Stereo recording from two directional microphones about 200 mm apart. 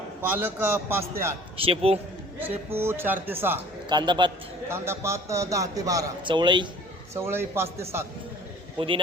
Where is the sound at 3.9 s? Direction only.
20° right (ahead or behind).